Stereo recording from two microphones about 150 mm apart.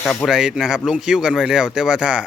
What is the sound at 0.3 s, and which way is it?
Speech, 5° right (ahead or behind).